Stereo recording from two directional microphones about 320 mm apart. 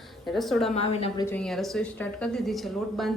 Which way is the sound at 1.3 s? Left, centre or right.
Centre.